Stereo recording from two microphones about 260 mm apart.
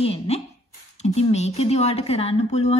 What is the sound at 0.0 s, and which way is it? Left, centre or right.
A woman's voice, left.